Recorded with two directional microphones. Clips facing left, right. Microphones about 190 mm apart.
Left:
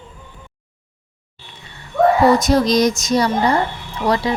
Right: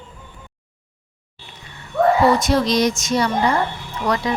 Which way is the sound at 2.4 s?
40° left (ahead or behind).